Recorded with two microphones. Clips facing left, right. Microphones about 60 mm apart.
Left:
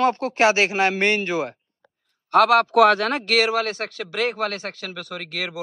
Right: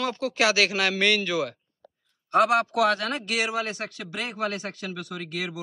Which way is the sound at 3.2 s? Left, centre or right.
Left.